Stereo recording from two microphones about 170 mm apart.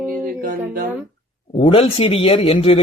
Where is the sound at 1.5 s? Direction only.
35° left (ahead or behind).